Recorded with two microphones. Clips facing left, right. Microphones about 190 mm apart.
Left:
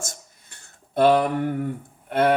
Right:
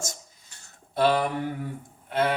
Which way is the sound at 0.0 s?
55° left (ahead or behind).